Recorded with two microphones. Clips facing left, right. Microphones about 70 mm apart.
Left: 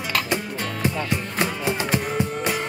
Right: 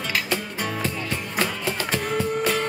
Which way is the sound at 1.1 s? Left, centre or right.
Centre.